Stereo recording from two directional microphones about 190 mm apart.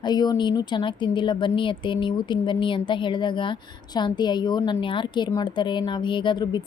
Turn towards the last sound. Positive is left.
turn(degrees=20)  # may be behind; listen again after turning